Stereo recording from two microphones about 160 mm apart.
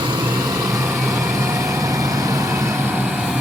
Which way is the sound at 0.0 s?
30° right (ahead or behind).